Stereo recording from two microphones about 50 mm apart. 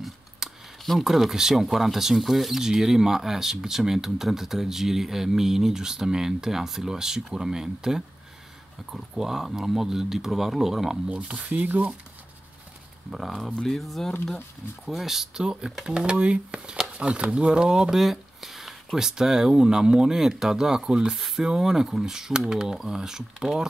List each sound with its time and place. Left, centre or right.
0.4 s a sound: centre
0.8 s speech: centre
11.1 s speech: right
13.1 s speech: centre
13.5 s speech: centre
13.7 s speech: centre